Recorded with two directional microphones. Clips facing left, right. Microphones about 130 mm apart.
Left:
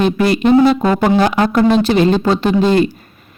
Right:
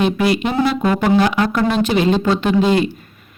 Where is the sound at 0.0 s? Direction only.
40° left (ahead or behind).